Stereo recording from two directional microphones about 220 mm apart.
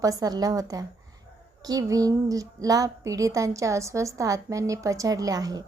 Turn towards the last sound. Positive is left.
turn(degrees=-15)  # may be behind; listen again after turning